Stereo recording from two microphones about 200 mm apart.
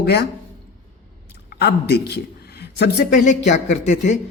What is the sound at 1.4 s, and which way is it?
A man's voice, 55° left (ahead or behind).